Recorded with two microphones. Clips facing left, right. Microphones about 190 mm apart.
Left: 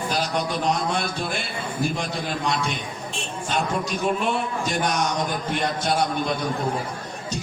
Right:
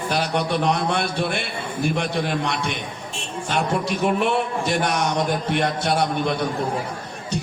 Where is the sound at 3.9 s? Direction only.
65° right (ahead or behind).